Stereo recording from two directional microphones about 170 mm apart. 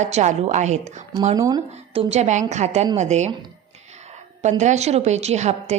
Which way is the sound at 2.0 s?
40° right (ahead or behind).